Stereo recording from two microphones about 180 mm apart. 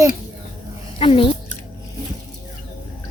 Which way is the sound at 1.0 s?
30° left (ahead or behind).